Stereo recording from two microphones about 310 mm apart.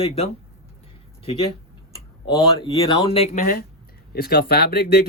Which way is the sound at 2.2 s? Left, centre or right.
Centre.